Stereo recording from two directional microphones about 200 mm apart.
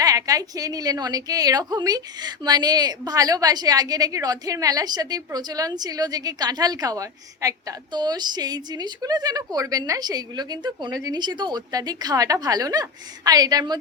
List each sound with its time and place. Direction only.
0.0 s a woman's voice: 15° right (ahead or behind)